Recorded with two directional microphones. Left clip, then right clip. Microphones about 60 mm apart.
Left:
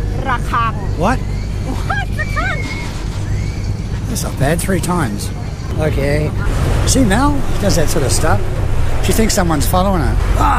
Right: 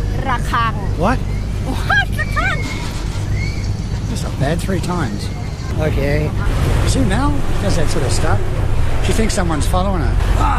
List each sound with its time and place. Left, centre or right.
0.5 s speech: right
1.0 s speech: left
1.7 s a sound: right
4.1 s speech: left
6.9 s speech: left